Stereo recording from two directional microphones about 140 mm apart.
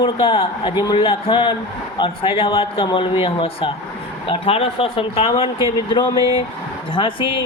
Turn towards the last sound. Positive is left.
turn(degrees=35)  # may be behind; listen again after turning